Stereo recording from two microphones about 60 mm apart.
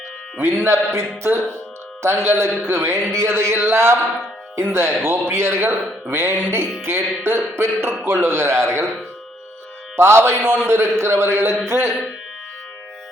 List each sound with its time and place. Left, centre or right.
0.4 s a man's voice: right
9.9 s a man's voice: right